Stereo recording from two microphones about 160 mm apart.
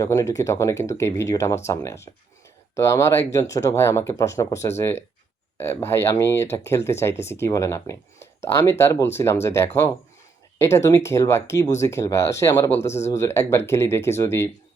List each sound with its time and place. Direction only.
0.0 s speech: 20° left (ahead or behind)